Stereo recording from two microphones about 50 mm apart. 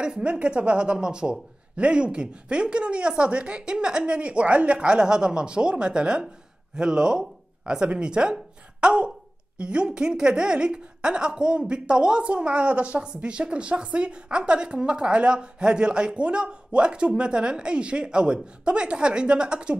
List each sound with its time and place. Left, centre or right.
0.0 s speech: centre